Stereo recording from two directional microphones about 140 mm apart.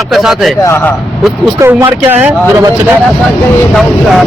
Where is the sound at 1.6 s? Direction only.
15° right (ahead or behind).